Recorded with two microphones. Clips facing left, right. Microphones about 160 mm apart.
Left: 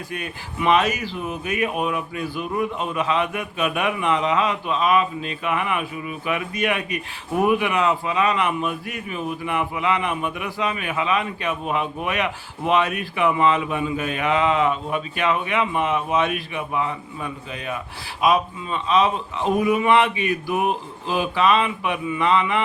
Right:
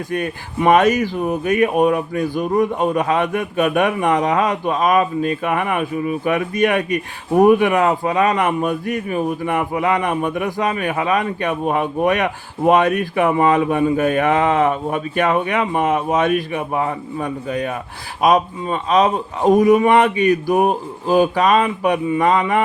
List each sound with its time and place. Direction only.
0.1 s speech: 45° right (ahead or behind)